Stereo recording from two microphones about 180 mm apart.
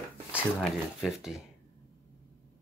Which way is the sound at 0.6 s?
Centre (ahead or behind).